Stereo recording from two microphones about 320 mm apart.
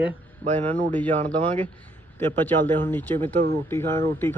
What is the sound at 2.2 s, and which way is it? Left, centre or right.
Speech, centre.